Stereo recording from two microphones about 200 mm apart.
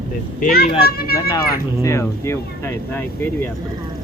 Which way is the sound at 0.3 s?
45° left (ahead or behind).